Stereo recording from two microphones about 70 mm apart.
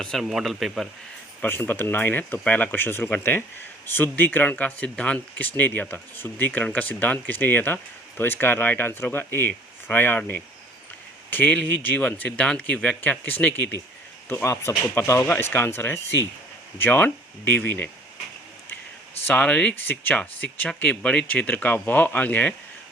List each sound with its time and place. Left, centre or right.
0.0 s speech: centre
1.4 s speech: left
19.3 s speech: left
19.7 s speech: left
21.4 s speech: left